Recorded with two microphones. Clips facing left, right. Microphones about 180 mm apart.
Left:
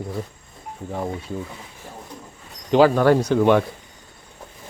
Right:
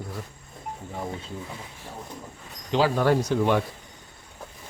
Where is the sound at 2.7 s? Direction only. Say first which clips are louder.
Left 7 dB; 60° left (ahead or behind).